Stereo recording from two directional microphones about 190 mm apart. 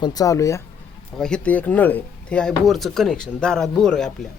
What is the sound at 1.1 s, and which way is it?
Speech, 5° left (ahead or behind).